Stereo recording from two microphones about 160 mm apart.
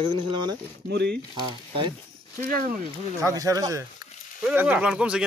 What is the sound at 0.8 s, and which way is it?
Speech, 90° right.